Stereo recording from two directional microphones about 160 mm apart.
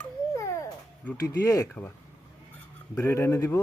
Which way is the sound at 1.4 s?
20° left (ahead or behind).